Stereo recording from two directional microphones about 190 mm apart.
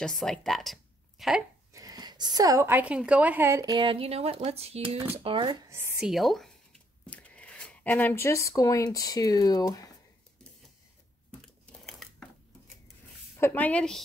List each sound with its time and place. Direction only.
0.0 s speech: centre (ahead or behind)
1.7 s a woman's voice: 20° right (ahead or behind)
5.7 s speech: 5° right (ahead or behind); by 9.9 s 20° left (ahead or behind)
11.8 s a sound: centre (ahead or behind)
13.4 s a woman's voice: 10° left (ahead or behind)